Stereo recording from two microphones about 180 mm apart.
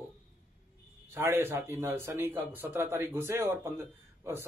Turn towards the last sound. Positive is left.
turn(degrees=-15)  # may be behind; listen again after turning